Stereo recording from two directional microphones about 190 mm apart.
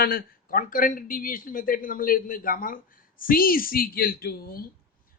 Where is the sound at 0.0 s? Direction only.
50° left (ahead or behind).